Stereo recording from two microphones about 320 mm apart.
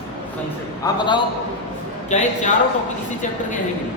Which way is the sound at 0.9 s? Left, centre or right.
Centre.